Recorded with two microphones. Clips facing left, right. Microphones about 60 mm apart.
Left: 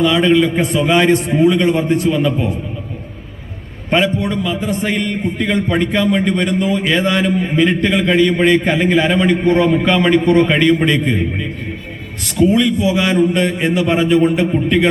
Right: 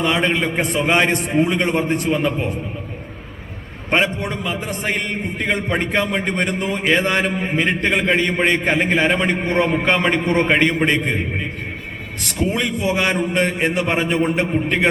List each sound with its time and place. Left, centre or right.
0.0 s a man's voice: right
3.8 s a man's voice: right
4.9 s a man's voice: right
6.2 s a man's voice: right